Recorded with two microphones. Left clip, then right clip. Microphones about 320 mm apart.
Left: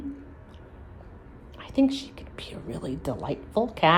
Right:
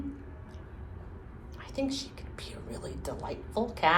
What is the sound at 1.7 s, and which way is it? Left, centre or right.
A woman's voice, left.